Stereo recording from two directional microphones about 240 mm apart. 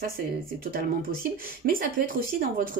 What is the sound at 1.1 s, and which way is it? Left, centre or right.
Speech, right.